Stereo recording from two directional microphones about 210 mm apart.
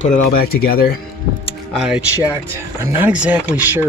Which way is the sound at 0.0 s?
40° left (ahead or behind).